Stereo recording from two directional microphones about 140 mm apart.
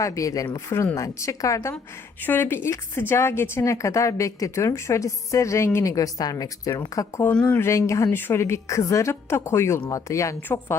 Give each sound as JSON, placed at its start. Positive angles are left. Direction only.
{"t": 0.0, "sound": "a woman's voice", "side_deg": 25}
{"t": 7.3, "sound": "a woman's voice", "side_deg": 10}